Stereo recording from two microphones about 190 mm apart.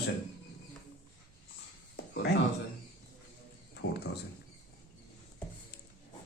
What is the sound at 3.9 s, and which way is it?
Speech, 60° left (ahead or behind).